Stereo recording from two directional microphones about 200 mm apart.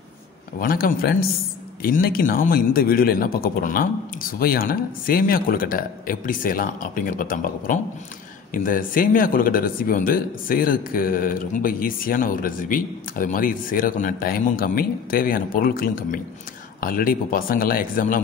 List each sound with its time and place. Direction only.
0.6 s speech: 45° left (ahead or behind)